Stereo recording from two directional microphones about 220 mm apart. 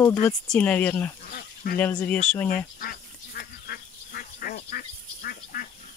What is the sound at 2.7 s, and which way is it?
Duck, 45° left (ahead or behind).